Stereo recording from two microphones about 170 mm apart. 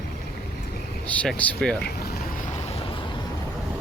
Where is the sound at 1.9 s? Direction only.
60° left (ahead or behind).